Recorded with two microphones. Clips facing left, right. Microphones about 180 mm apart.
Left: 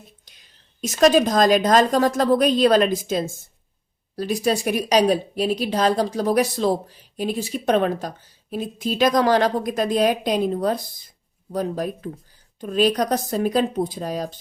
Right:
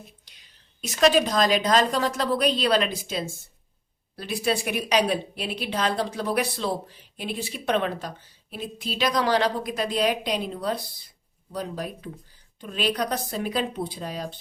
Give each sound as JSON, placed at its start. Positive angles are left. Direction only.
{"t": 0.8, "sound": "a woman's voice", "side_deg": 45}